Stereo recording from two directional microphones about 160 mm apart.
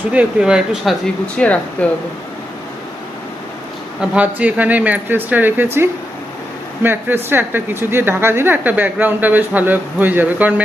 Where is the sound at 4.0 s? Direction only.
10° right (ahead or behind).